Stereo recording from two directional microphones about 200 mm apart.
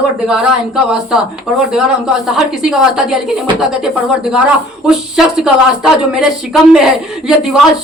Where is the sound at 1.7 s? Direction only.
5° right (ahead or behind).